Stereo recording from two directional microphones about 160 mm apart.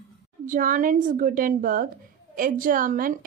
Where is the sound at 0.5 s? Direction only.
55° right (ahead or behind).